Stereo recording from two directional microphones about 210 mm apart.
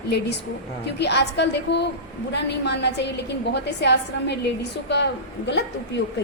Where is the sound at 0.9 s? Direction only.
55° left (ahead or behind).